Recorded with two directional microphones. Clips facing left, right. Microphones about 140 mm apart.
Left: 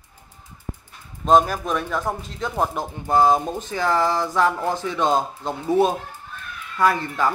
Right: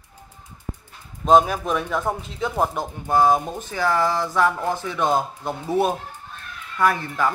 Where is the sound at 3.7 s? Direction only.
15° left (ahead or behind).